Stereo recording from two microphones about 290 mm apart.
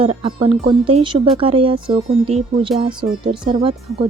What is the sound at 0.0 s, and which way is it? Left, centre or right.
Speech, centre.